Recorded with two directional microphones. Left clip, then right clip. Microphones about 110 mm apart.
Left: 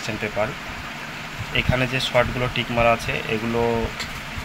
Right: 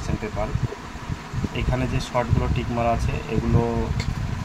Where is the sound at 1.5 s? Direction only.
5° right (ahead or behind).